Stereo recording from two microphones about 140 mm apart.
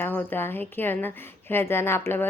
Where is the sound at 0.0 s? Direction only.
15° left (ahead or behind).